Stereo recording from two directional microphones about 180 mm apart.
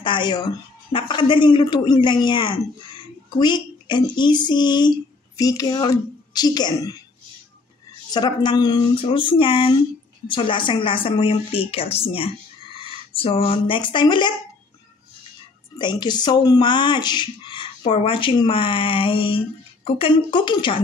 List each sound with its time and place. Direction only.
0.0 s speech: 25° left (ahead or behind)
8.1 s speech: 25° left (ahead or behind)
15.8 s speech: 25° left (ahead or behind)